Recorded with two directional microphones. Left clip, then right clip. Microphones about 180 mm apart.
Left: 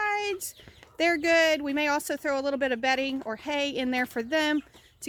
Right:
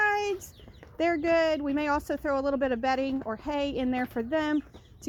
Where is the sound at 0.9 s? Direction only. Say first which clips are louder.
Left 2 dB; 35° left (ahead or behind).